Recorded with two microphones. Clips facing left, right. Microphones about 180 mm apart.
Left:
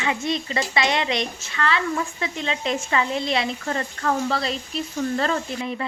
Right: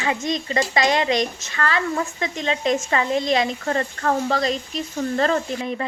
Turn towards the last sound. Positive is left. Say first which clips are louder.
# right 2 dB
turn(degrees=-40)  # may be behind; listen again after turning